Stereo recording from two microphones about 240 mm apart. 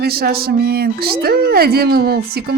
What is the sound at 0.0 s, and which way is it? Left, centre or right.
A woman's voice, right.